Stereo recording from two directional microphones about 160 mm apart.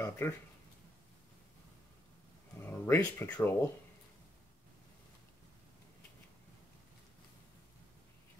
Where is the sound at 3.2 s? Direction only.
10° left (ahead or behind).